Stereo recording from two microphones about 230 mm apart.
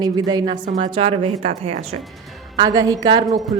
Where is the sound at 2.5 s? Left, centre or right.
Centre.